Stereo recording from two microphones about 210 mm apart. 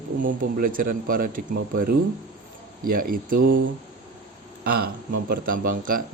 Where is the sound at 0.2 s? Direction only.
40° right (ahead or behind).